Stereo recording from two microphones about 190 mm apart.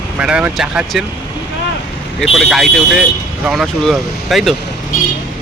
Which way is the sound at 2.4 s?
Centre (ahead or behind).